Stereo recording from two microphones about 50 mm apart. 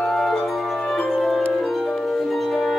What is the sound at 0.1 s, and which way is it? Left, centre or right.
Music, centre.